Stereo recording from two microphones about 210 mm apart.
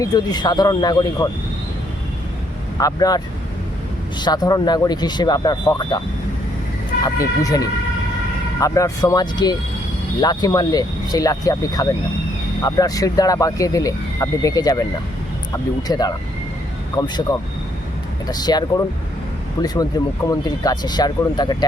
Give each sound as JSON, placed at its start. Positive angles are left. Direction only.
{"t": 0.0, "sound": "speech", "side_deg": 20}
{"t": 2.7, "sound": "speech", "side_deg": 15}
{"t": 4.2, "sound": "speech", "side_deg": 20}
{"t": 7.0, "sound": "speech", "side_deg": 15}
{"t": 15.9, "sound": "speech", "side_deg": 20}
{"t": 19.6, "sound": "speech", "side_deg": 20}